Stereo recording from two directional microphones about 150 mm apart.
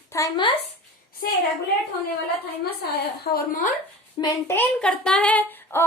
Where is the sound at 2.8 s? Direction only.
85° left.